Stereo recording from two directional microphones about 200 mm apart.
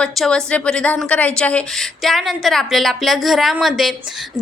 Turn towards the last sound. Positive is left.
turn(degrees=0)  # may be behind; listen again after turning